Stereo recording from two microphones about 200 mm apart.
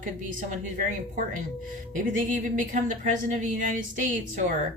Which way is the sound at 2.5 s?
40° right (ahead or behind).